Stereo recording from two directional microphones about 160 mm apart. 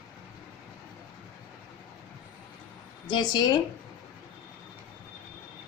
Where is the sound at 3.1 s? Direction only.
30° left (ahead or behind).